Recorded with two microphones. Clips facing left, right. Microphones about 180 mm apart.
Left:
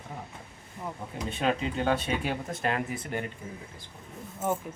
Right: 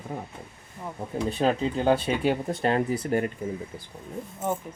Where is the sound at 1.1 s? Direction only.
30° right (ahead or behind).